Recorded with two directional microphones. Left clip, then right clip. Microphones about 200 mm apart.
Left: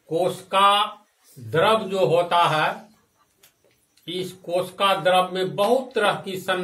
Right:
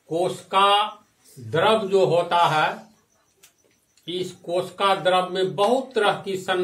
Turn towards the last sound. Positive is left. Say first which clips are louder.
# even
turn(degrees=-15)  # may be behind; listen again after turning